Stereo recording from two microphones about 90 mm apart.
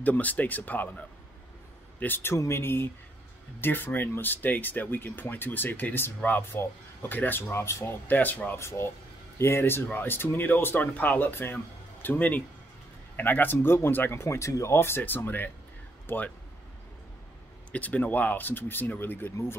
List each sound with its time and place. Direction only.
0.0 s speech: 20° left (ahead or behind)
8.5 s speech: 30° left (ahead or behind)
17.7 s speech: 15° left (ahead or behind)